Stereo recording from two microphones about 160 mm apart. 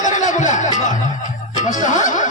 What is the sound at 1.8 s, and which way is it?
Speech, 50° left (ahead or behind).